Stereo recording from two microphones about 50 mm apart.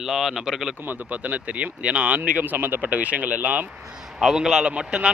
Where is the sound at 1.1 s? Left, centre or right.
Right.